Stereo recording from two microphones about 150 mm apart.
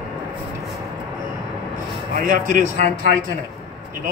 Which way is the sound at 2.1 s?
60° right (ahead or behind).